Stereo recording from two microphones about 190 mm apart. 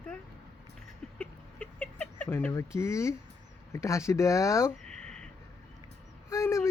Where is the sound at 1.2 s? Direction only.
5° left (ahead or behind).